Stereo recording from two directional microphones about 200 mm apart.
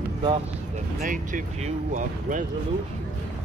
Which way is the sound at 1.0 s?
40° right (ahead or behind).